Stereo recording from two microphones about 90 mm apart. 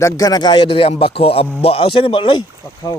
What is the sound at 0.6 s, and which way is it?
A man's voice, 90° left.